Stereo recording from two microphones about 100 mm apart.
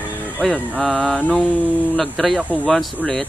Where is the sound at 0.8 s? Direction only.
10° left (ahead or behind).